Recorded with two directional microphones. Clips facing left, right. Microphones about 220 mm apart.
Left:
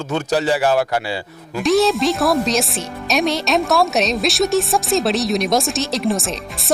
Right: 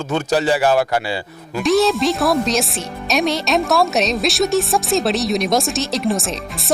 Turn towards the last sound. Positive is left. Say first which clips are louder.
# even
turn(degrees=0)  # may be behind; listen again after turning